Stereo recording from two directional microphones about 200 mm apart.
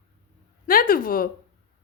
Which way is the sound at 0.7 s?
45° left (ahead or behind).